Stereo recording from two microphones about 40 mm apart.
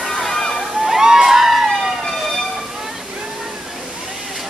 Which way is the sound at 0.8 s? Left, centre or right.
Centre.